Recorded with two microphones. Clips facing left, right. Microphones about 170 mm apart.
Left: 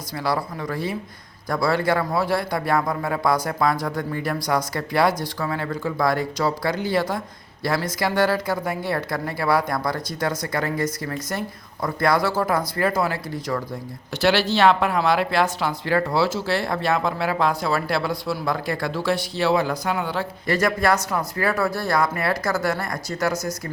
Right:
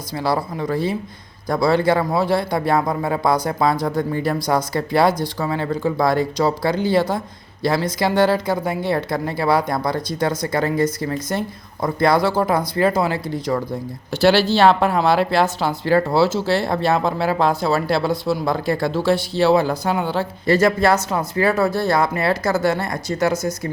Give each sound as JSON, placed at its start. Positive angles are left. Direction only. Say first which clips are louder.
{"t": 0.2, "sound": "speech", "louder": "right 4 dB", "side_deg": -25}